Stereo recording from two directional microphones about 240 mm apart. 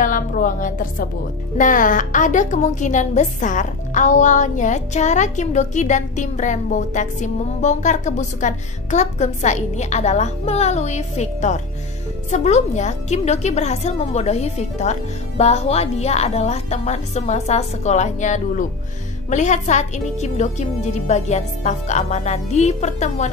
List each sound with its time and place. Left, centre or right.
0.0 s a woman's voice: left